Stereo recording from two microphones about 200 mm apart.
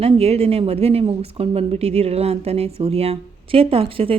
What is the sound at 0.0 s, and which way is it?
Speech, 30° right (ahead or behind).